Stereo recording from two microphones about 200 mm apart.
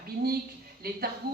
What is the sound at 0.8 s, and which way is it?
Speech, 50° right (ahead or behind).